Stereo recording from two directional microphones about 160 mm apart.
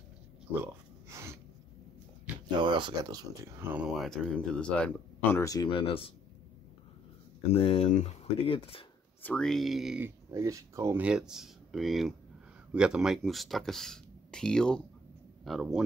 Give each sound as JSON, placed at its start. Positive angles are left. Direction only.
{"t": 0.6, "sound": "speech", "side_deg": -15}
{"t": 2.6, "sound": "speech", "side_deg": -25}
{"t": 4.0, "sound": "speech", "side_deg": 5}
{"t": 5.4, "sound": "speech", "side_deg": 25}
{"t": 7.5, "sound": "speech", "side_deg": 40}
{"t": 9.2, "sound": "speech", "side_deg": 5}
{"t": 10.0, "sound": "speech", "side_deg": -20}